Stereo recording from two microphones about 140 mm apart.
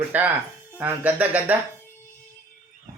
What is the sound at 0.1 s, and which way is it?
Speech, 10° right (ahead or behind).